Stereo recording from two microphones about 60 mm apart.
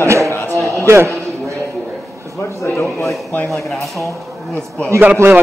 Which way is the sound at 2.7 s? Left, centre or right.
Left.